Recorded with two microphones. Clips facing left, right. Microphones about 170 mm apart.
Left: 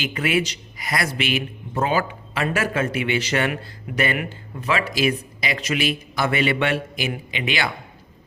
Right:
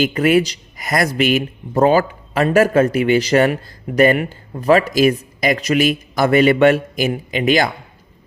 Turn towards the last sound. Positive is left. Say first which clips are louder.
# right 9 dB
turn(degrees=-40)  # may be behind; listen again after turning